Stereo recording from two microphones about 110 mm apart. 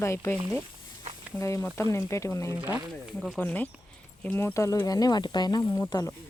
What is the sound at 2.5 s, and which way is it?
Speech, 15° right (ahead or behind).